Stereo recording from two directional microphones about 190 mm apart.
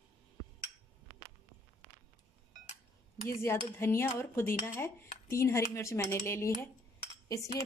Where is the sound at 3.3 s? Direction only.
15° left (ahead or behind).